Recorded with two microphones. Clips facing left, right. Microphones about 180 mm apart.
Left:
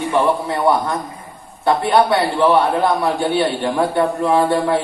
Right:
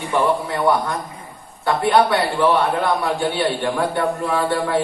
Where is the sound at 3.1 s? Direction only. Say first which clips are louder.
Left 3 dB; 20° left (ahead or behind).